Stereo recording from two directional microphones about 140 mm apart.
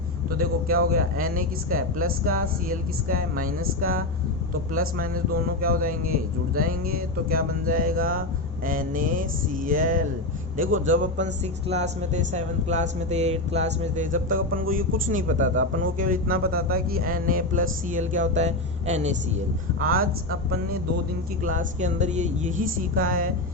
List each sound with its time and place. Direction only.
0.3 s speech: 90° right
8.6 s speech: 80° right
11.7 s speech: 55° right (ahead or behind)
19.8 s speech: 90° right
21.4 s speech: 70° right (ahead or behind)